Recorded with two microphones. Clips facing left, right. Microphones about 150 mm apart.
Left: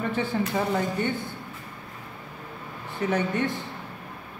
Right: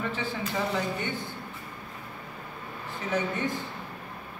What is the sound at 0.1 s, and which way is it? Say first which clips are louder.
Speech: left 5 dB; 55° left (ahead or behind).